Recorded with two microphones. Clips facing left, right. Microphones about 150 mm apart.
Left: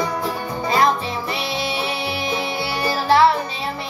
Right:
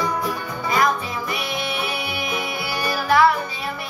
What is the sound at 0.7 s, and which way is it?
Music, 30° left (ahead or behind).